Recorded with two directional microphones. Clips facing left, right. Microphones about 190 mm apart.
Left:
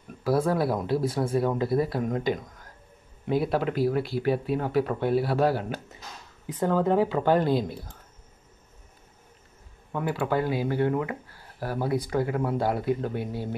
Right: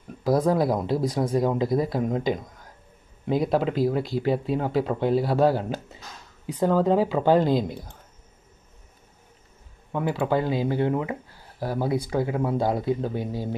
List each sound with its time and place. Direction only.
0.2 s speech: 15° right (ahead or behind)
3.3 s speech: 15° right (ahead or behind)
9.9 s speech: 25° right (ahead or behind)